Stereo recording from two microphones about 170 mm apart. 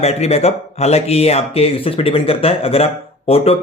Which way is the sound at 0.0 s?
40° left (ahead or behind).